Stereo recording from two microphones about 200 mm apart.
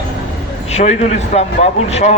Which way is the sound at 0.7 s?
35° left (ahead or behind).